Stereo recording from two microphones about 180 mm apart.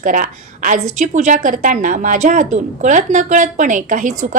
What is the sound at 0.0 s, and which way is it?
A woman's voice, 45° right (ahead or behind).